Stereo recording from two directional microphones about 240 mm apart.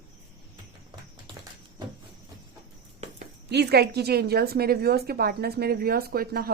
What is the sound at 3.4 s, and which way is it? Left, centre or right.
Speech, right.